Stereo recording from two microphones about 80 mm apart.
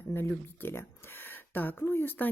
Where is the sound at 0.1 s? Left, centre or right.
Left.